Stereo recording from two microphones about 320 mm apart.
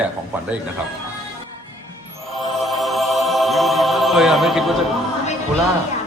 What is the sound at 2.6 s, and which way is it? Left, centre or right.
Music, centre.